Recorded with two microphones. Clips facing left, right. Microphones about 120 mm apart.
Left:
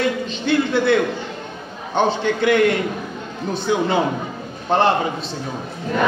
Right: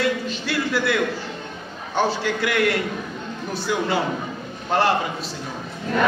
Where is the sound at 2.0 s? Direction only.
20° left (ahead or behind).